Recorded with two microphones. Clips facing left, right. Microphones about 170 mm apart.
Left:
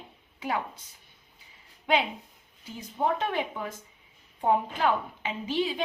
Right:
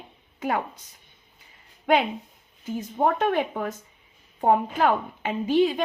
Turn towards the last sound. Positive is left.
turn(degrees=-50)  # may be behind; listen again after turning